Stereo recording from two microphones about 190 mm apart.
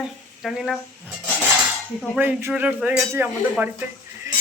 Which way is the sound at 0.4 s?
Centre (ahead or behind).